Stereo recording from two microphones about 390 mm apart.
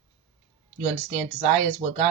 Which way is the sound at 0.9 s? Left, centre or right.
Centre.